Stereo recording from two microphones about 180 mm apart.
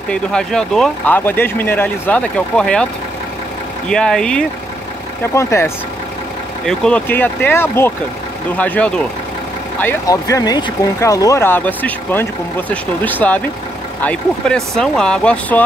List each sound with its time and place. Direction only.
0.1 s speech: 5° left (ahead or behind)
3.9 s speech: 5° left (ahead or behind)
5.3 s speech: 15° left (ahead or behind)
6.6 s speech: 5° left (ahead or behind)
14.4 s speech: 5° left (ahead or behind)